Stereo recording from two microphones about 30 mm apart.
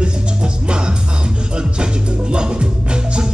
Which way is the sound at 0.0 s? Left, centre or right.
Right.